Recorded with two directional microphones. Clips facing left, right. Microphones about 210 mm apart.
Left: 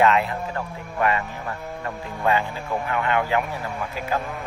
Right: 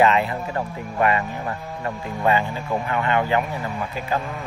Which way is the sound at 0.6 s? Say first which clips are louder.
Right 4 dB; 20° right (ahead or behind).